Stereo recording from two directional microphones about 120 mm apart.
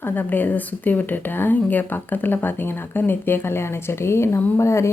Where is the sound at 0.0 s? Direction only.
15° left (ahead or behind).